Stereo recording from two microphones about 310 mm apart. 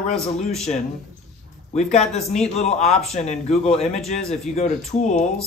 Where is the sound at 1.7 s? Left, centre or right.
Left.